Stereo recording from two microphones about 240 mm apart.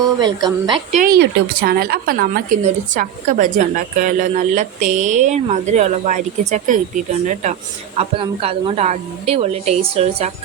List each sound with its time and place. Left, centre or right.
0.0 s a woman's voice: centre